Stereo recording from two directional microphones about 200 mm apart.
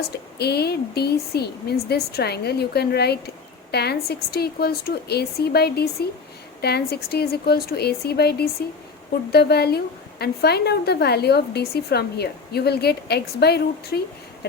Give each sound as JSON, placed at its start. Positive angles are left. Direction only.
{"t": 0.1, "sound": "a woman's voice", "side_deg": 55}